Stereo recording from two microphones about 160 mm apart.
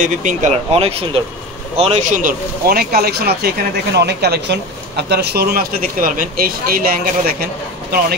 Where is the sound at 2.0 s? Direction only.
60° right (ahead or behind).